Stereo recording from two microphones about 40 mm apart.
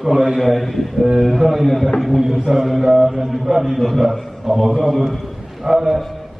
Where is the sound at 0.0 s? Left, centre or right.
Centre.